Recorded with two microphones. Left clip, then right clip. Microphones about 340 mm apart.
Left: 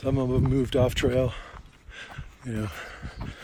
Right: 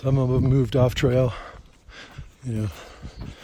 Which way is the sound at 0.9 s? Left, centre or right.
Right.